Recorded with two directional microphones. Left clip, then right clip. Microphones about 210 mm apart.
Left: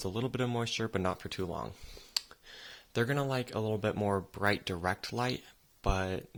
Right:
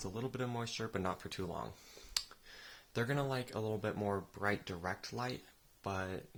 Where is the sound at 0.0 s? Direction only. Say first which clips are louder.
Left 7 dB; 40° left (ahead or behind).